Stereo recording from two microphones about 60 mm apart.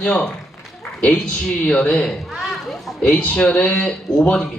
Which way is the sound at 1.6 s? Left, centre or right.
Centre.